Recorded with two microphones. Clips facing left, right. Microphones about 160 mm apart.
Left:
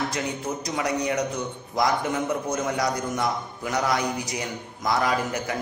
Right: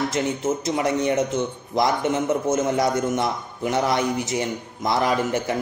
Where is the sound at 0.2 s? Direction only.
25° right (ahead or behind).